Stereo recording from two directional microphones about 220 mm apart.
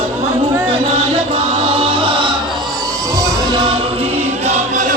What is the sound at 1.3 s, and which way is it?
Music, 25° right (ahead or behind).